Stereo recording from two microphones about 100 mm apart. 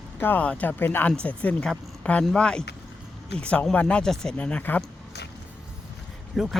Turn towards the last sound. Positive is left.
turn(degrees=0)  # may be behind; listen again after turning